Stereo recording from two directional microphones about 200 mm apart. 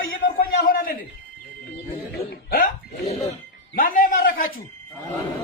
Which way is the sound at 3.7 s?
45° left (ahead or behind).